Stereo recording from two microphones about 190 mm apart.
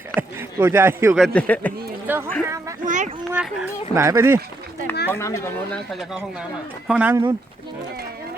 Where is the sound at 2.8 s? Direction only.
40° right (ahead or behind).